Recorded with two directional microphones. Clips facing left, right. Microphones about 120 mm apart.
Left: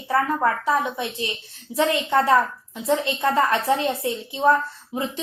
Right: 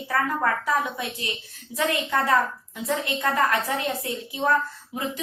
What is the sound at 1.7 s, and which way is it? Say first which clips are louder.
A woman's voice: left 5 dB; 30° left (ahead or behind).